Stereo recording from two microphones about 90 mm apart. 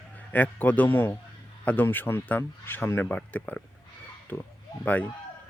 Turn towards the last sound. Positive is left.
turn(degrees=20)  # may be behind; listen again after turning